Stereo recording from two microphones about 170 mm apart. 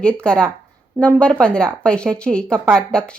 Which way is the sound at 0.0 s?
5° left (ahead or behind).